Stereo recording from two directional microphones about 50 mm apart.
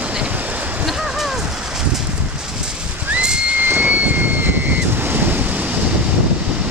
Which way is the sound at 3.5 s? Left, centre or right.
Right.